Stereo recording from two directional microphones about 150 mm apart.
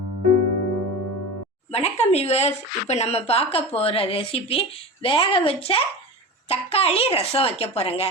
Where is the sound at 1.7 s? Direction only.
45° left (ahead or behind).